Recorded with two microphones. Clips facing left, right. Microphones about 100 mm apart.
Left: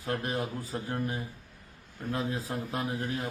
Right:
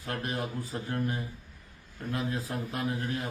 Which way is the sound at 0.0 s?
25° left (ahead or behind).